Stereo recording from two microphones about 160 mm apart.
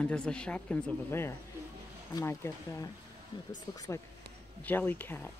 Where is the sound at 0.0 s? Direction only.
5° left (ahead or behind).